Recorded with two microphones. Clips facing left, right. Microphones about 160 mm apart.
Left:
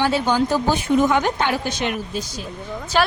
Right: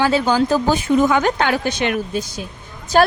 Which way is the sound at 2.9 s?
45° right (ahead or behind).